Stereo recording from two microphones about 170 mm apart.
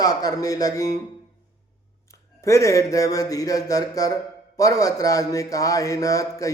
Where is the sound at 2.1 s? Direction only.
15° left (ahead or behind).